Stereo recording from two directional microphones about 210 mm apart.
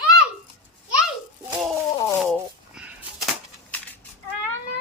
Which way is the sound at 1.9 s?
25° left (ahead or behind).